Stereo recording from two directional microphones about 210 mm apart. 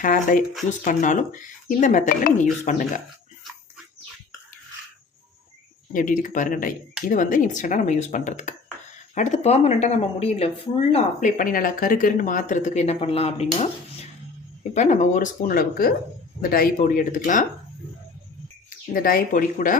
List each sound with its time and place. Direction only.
0.0 s speech: 40° left (ahead or behind)
5.9 s speech: 40° left (ahead or behind)
14.7 s speech: 35° left (ahead or behind)
18.9 s speech: 45° left (ahead or behind)